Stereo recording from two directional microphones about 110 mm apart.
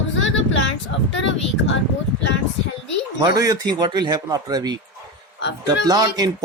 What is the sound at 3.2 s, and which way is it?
Speech, 35° right (ahead or behind).